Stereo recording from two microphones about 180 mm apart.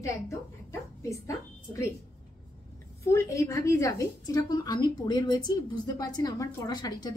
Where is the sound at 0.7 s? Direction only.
15° left (ahead or behind).